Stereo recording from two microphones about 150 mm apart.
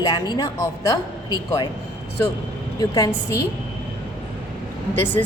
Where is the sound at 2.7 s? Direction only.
20° left (ahead or behind).